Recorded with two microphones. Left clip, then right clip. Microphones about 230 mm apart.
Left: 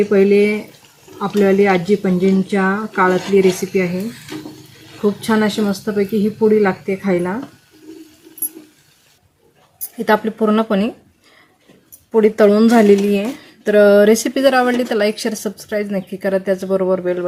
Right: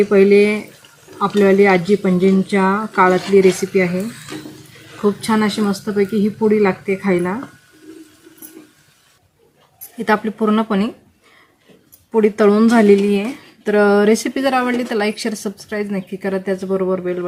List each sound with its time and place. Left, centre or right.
0.0 s speech: centre
10.0 s speech: centre
12.1 s speech: centre